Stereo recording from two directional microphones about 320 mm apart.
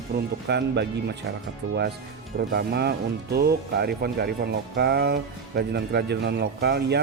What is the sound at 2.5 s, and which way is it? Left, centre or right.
Speech, right.